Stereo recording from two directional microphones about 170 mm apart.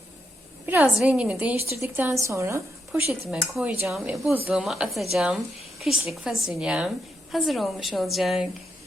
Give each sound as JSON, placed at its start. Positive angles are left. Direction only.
{"t": 0.6, "sound": "a woman's voice", "side_deg": -10}
{"t": 3.1, "sound": "a woman's voice", "side_deg": -5}